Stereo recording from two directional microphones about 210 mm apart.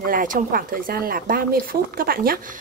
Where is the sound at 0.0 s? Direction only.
40° right (ahead or behind).